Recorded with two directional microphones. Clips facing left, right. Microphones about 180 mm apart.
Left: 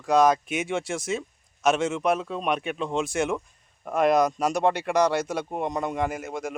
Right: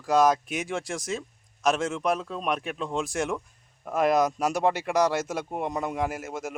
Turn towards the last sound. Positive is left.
turn(degrees=-5)  # may be behind; listen again after turning